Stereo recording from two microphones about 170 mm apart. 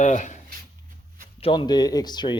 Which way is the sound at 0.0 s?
45° left (ahead or behind).